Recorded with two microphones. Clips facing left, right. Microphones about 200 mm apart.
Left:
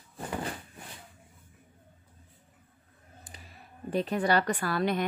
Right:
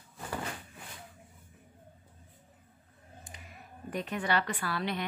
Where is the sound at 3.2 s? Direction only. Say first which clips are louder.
Even; 35° left (ahead or behind).